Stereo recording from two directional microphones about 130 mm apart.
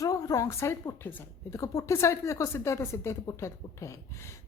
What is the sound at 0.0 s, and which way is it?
A woman's voice, 25° left (ahead or behind).